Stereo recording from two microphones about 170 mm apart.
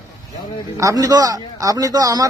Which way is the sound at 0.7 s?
20° right (ahead or behind).